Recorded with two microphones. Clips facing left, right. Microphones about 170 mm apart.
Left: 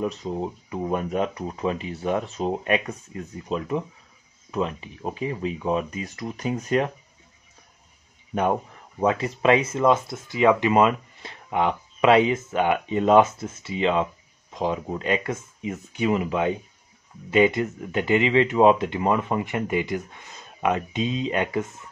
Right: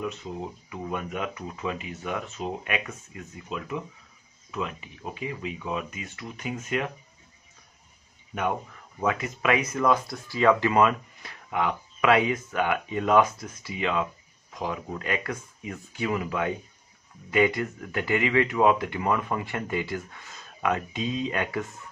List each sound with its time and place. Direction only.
0.0 s speech: 35° left (ahead or behind)
9.0 s speech: 30° left (ahead or behind)